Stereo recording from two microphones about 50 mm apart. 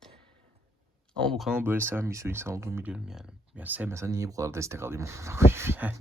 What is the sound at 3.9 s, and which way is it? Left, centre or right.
Speech, right.